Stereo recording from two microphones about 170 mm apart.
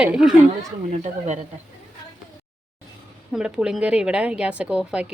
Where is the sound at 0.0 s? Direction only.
5° right (ahead or behind).